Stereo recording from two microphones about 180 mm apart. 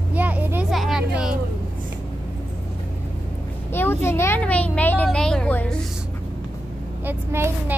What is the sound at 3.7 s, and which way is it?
Speech, 10° left (ahead or behind).